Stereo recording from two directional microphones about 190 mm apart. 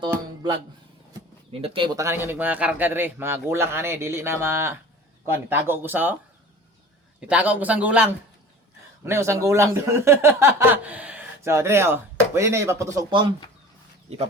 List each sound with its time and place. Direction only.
1.6 s speech: 30° right (ahead or behind)
2.0 s speech: 15° right (ahead or behind)
7.2 s speech: 5° right (ahead or behind); by 14.2 s 35° right (ahead or behind)